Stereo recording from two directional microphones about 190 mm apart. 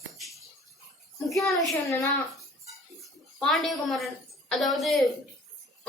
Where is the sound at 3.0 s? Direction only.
Centre (ahead or behind).